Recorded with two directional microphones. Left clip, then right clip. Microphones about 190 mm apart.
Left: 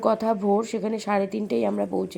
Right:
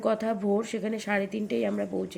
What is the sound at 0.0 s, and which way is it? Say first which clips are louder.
Speech: left 5 dB; 15° left (ahead or behind).